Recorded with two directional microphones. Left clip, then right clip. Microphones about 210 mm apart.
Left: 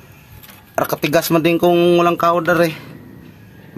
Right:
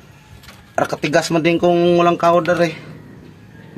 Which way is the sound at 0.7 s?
35° left (ahead or behind).